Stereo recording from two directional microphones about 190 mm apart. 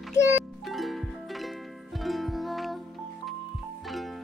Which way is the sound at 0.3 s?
Centre (ahead or behind).